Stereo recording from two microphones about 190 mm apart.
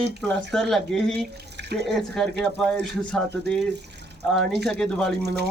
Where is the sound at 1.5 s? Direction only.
60° right (ahead or behind).